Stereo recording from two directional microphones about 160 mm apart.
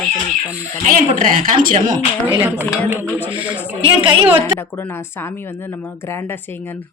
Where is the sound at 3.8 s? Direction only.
30° right (ahead or behind).